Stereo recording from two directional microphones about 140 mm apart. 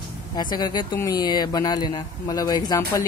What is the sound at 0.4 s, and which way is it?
Speech, 30° left (ahead or behind).